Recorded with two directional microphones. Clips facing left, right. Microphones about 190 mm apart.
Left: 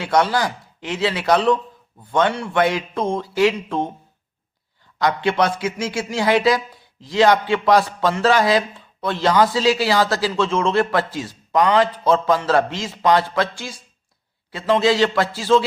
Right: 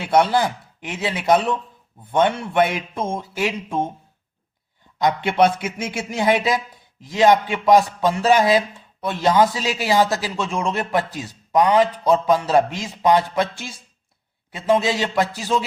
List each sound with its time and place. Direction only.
0.0 s a man's voice: 25° right (ahead or behind)
4.9 s a man's voice: 20° right (ahead or behind)
14.5 s a man's voice: 15° right (ahead or behind)